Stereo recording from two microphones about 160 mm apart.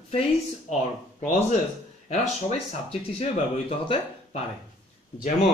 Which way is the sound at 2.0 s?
40° left (ahead or behind).